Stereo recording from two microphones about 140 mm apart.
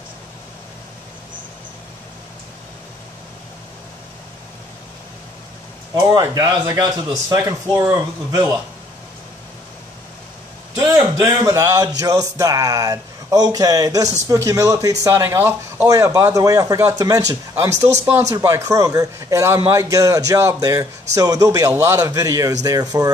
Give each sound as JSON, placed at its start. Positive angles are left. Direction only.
{"t": 6.1, "sound": "speech", "side_deg": -30}
{"t": 10.9, "sound": "speech", "side_deg": -25}